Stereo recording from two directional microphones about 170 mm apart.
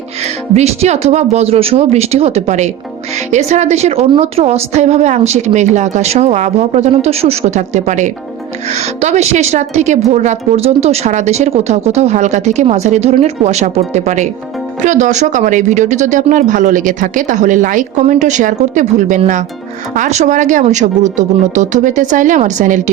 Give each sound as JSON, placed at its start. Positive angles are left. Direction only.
{"t": 0.5, "sound": "a woman's voice", "side_deg": -40}